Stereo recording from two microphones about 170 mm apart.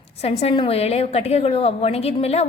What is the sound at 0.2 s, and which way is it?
A woman's voice, 35° left (ahead or behind).